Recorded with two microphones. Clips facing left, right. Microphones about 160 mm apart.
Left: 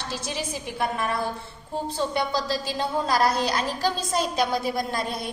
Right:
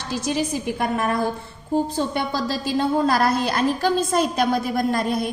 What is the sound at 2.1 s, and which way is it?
A woman's voice, 50° right (ahead or behind).